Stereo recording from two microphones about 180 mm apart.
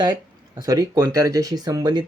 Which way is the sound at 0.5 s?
20° right (ahead or behind).